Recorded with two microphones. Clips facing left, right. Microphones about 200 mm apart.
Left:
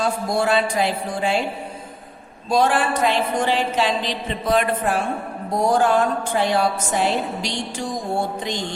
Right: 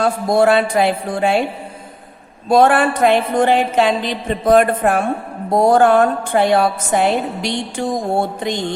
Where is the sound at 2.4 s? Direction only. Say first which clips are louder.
Right 6 dB; 60° right (ahead or behind).